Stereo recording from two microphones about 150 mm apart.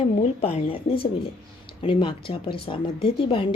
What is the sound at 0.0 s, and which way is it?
A woman's voice, 45° left (ahead or behind).